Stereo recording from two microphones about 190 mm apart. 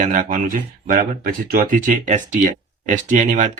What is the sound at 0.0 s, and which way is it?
Speech, 40° right (ahead or behind).